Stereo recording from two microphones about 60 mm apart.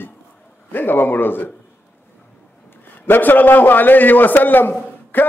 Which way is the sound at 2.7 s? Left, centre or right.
Left.